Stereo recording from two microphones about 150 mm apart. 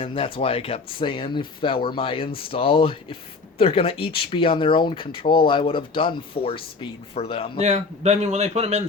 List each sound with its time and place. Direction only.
0.0 s speech: 35° left (ahead or behind)
7.6 s a man's voice: 50° right (ahead or behind)